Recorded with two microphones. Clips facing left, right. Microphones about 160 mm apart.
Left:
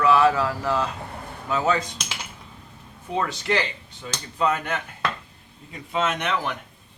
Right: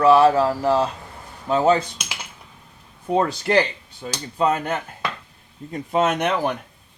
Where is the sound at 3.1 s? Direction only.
40° right (ahead or behind).